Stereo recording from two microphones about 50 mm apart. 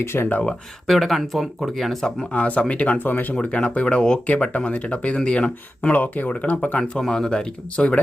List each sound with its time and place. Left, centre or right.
0.0 s speech: left
0.9 s speech: centre
2.3 s speech: left
3.0 s speech: left
3.3 s speech: left
5.9 s speech: left
6.7 s speech: centre